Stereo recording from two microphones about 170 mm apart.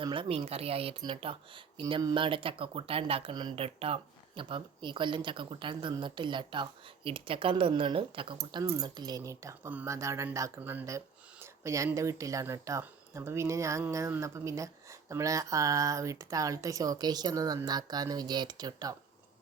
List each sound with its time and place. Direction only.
0.0 s speech: 30° right (ahead or behind)